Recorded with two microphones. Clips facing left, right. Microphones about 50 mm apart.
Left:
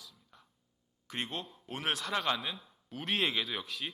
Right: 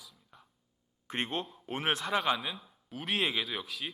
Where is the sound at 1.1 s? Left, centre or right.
Right; by 3.9 s centre.